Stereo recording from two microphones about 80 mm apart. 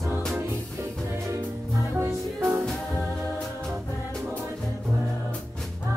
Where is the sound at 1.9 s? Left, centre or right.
Right.